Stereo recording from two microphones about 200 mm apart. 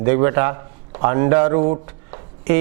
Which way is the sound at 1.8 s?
15° right (ahead or behind).